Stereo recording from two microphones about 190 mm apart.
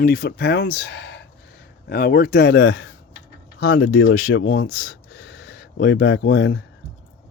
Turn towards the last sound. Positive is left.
turn(degrees=85)